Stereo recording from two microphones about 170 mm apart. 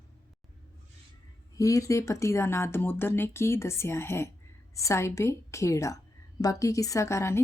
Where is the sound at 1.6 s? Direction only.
20° left (ahead or behind).